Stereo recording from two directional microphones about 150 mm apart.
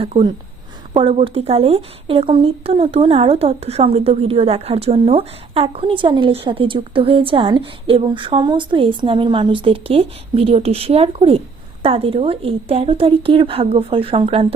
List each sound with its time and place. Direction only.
0.0 s a woman's voice: 40° right (ahead or behind)